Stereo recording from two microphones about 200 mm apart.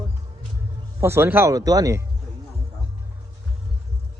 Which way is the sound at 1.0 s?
10° right (ahead or behind).